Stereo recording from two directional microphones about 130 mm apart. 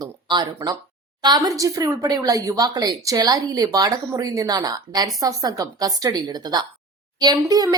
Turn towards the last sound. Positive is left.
turn(degrees=-30)  # may be behind; listen again after turning